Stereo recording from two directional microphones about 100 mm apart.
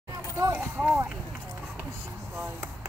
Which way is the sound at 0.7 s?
20° right (ahead or behind).